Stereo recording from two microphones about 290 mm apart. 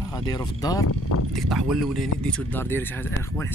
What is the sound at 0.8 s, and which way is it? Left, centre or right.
Speech, left.